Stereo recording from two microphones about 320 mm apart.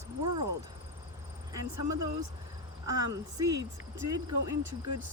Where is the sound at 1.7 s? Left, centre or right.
Right.